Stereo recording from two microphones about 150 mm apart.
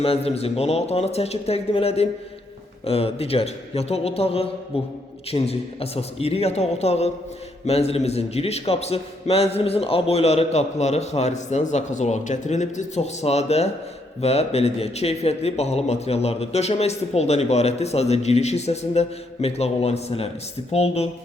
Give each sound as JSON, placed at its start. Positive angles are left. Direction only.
{"t": 0.0, "sound": "a man's voice", "side_deg": 40}